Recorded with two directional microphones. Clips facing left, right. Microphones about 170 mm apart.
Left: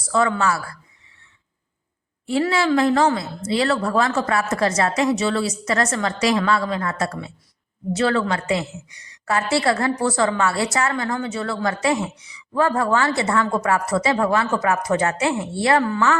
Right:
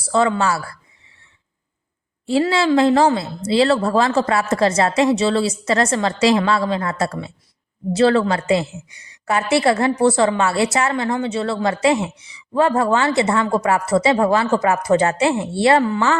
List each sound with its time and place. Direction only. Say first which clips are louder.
0.1 s a woman's voice: right 2 dB; 25° right (ahead or behind)
2.2 s a woman's voice: right 3 dB; 30° right (ahead or behind)